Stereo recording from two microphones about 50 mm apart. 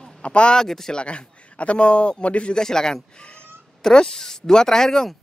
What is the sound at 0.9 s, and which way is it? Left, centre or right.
A man's voice, left.